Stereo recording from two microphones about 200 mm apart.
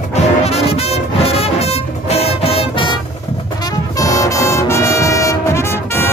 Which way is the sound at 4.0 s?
15° left (ahead or behind).